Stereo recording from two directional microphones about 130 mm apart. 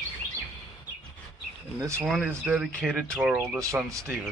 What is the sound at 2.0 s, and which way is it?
Speech, centre (ahead or behind).